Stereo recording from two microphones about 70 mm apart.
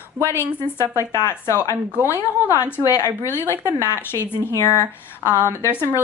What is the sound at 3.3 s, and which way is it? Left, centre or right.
Speech, left.